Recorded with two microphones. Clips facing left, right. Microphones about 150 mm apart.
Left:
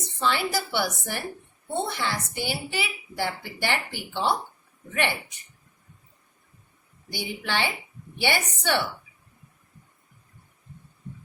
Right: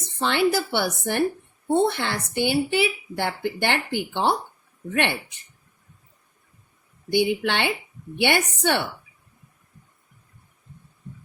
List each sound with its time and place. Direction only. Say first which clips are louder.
0.0 s a woman's voice: right 5 dB; 60° right (ahead or behind)
7.1 s a woman's voice: right 9 dB; 60° right (ahead or behind)